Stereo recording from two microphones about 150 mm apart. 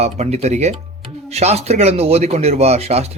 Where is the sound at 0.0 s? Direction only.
45° right (ahead or behind).